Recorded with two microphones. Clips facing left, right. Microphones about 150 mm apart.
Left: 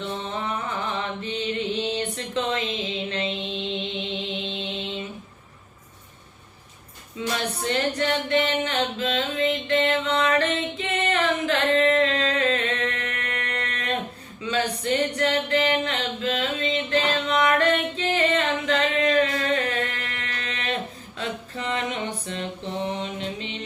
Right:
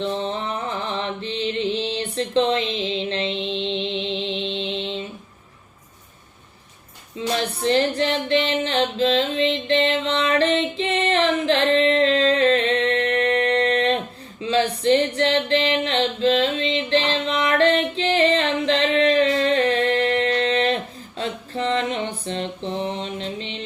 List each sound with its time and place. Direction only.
0.0 s music: 30° right (ahead or behind)
7.2 s a sound: 30° right (ahead or behind)
14.4 s music: 30° right (ahead or behind)
21.2 s mantra: 30° right (ahead or behind)